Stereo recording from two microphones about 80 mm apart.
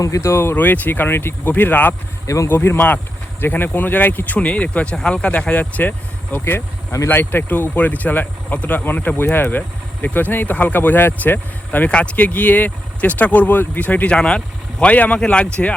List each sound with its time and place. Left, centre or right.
0.0 s speech: left
0.5 s speech: left
2.2 s speech: left
2.5 s speech: left
6.4 s speech: left
7.1 s speech: left